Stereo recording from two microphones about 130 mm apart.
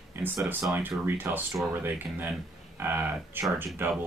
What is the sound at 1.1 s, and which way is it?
Speech, 15° right (ahead or behind).